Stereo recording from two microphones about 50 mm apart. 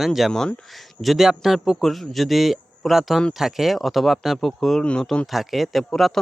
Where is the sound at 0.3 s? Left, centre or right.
Centre.